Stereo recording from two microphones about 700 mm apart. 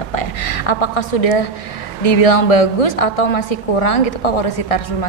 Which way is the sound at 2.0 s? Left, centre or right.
Left.